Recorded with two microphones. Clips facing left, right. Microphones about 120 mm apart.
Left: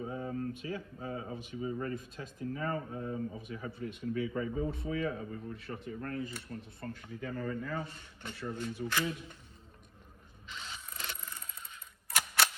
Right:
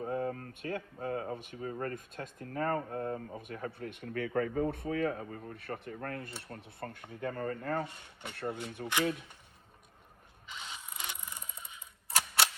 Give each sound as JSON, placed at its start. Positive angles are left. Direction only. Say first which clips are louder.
{"t": 0.0, "sound": "speech", "louder": "right 2 dB", "side_deg": -55}
{"t": 10.5, "sound": "a sound", "louder": "right 1 dB", "side_deg": -15}
{"t": 12.1, "sound": "cap gun", "louder": "even", "side_deg": -30}